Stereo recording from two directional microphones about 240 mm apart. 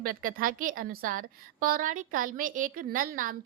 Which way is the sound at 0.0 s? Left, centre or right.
Right.